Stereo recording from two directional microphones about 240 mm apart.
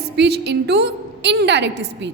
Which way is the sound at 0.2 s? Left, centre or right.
Right.